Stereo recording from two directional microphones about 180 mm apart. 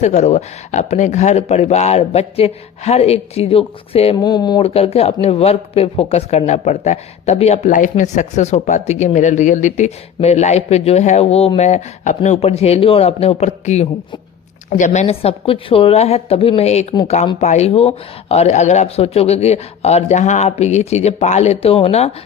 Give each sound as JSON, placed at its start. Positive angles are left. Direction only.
{"t": 0.0, "sound": "speech", "side_deg": 40}
{"t": 4.2, "sound": "speech", "side_deg": 20}
{"t": 4.6, "sound": "speech", "side_deg": 35}